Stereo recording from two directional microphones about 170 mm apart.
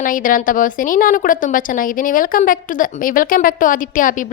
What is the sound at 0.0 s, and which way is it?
A woman's voice, 55° left (ahead or behind).